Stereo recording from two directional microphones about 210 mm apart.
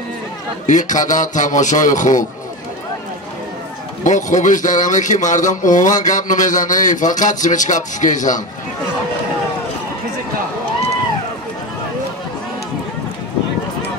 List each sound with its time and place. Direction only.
0.7 s a man's voice: 35° left (ahead or behind)
4.0 s a man's voice: 35° left (ahead or behind)